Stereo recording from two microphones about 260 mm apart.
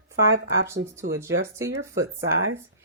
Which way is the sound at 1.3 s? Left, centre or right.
Right.